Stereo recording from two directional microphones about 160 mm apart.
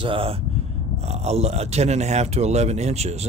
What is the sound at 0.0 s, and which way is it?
Speech, 35° right (ahead or behind).